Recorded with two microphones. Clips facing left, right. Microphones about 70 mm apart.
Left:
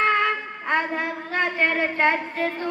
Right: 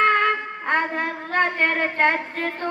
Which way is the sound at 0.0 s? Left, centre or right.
Right.